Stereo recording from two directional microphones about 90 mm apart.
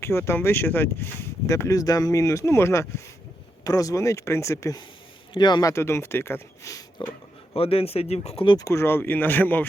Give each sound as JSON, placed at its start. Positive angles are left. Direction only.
{"t": 0.0, "sound": "speech", "side_deg": 30}
{"t": 3.6, "sound": "speech", "side_deg": 40}
{"t": 5.3, "sound": "speech", "side_deg": 55}
{"t": 5.6, "sound": "speech", "side_deg": 30}
{"t": 7.5, "sound": "speech", "side_deg": 90}
{"t": 8.5, "sound": "speech", "side_deg": 35}